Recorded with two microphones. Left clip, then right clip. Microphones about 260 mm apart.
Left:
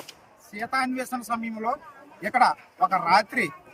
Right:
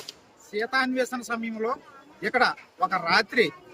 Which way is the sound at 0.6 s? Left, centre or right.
Centre.